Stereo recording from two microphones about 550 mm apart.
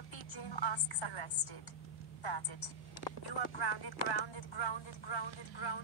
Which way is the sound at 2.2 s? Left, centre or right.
Left.